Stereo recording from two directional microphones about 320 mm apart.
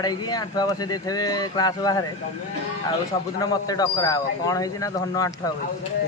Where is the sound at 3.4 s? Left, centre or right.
Centre.